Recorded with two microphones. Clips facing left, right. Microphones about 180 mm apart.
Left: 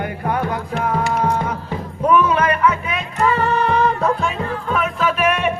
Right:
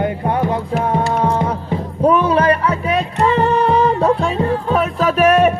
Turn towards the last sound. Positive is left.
turn(degrees=-40)  # may be behind; listen again after turning